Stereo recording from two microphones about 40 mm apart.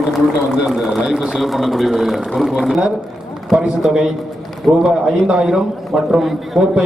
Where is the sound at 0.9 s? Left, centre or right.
Centre.